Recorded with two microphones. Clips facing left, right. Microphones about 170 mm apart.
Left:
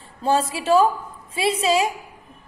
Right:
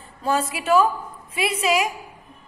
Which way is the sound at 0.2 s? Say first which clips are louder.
Left 3 dB; 30° left (ahead or behind).